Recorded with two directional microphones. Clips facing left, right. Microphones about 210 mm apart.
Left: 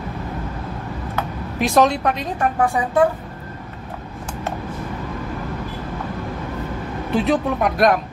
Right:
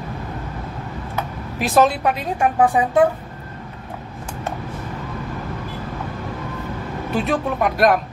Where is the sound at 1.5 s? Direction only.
5° right (ahead or behind).